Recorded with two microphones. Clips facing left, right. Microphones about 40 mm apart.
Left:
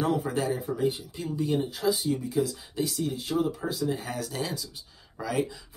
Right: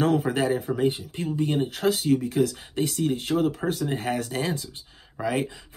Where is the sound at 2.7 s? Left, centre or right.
Right.